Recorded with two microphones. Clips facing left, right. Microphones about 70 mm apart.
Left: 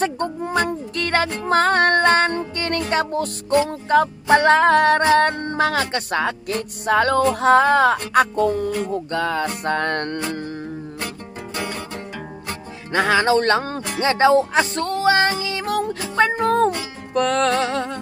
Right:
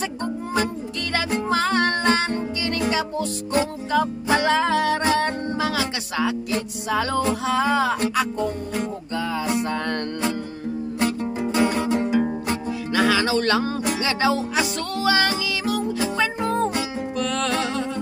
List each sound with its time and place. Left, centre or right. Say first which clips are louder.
0.9 s music: left 4 dB; left
8.4 s music: left 7 dB; left
9.1 s music: even; left
11.5 s music: right 8 dB; centre
12.9 s music: left 3 dB; left
16.2 s music: left 8 dB; left